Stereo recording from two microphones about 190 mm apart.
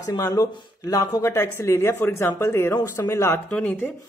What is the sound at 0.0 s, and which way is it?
Speech, 20° left (ahead or behind).